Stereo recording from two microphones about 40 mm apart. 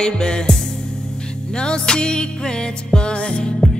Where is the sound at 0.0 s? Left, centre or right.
Left.